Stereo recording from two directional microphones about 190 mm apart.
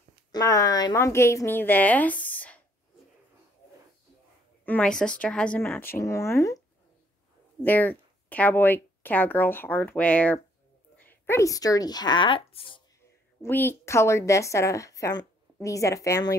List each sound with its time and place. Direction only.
0.3 s a woman's voice: 20° left (ahead or behind)
4.6 s a woman's voice: 5° left (ahead or behind)
7.6 s a woman's voice: 10° left (ahead or behind); by 12.8 s 25° left (ahead or behind)
13.4 s a woman's voice: 10° left (ahead or behind)